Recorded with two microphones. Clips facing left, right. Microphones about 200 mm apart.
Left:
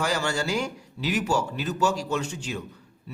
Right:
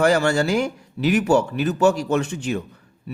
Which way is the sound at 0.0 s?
55° right (ahead or behind).